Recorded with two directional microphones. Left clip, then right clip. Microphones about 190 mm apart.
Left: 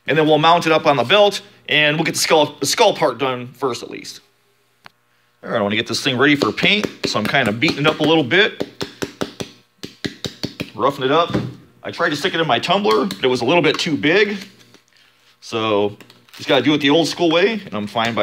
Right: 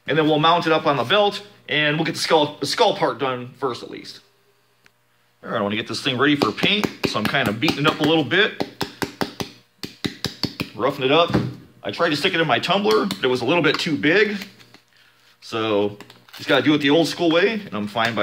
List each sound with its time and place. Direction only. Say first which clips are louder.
0.0 s a man's voice: left 4 dB; 40° left (ahead or behind)
5.4 s a man's voice: left 4 dB; 35° left (ahead or behind)
8.5 s a sound: even; 10° right (ahead or behind)
10.8 s speech: left 2 dB; 25° left (ahead or behind)
15.4 s a man's voice: left 3 dB; 30° left (ahead or behind)